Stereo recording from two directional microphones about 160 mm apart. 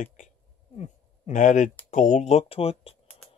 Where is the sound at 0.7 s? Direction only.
45° left (ahead or behind).